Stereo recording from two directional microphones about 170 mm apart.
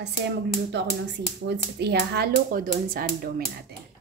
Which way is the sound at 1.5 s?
75° right (ahead or behind).